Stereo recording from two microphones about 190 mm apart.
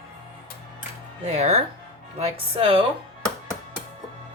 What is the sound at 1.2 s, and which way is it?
Speech, 35° right (ahead or behind).